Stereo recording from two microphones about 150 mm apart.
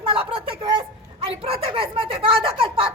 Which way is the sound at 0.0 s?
40° right (ahead or behind).